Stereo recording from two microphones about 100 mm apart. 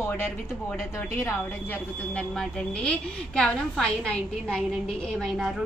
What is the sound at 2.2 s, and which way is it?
A woman's voice, 10° left (ahead or behind).